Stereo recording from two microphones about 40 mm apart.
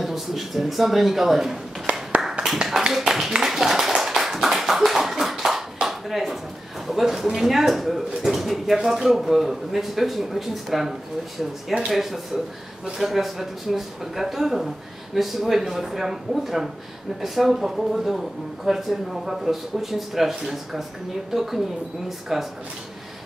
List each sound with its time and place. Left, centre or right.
0.0 s speech: centre
2.2 s tap: centre
2.9 s speech: centre
3.4 s clapping: centre
5.9 s a sound: centre
6.9 s speech: centre